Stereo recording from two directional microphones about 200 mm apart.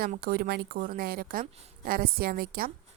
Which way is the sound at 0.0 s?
45° right (ahead or behind).